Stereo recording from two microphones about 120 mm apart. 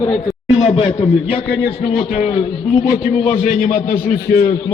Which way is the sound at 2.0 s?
55° left (ahead or behind).